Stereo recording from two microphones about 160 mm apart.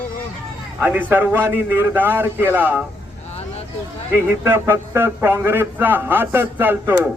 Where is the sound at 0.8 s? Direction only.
10° right (ahead or behind).